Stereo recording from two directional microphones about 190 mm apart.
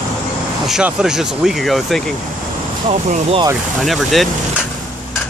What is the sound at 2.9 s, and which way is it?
Speech, 35° right (ahead or behind).